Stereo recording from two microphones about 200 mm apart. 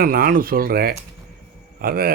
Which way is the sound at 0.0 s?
45° right (ahead or behind).